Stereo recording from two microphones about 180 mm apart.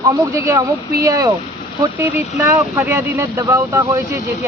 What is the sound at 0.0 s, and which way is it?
Speech, 20° right (ahead or behind).